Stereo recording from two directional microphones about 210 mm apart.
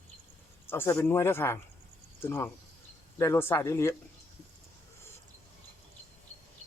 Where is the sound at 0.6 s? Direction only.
10° left (ahead or behind).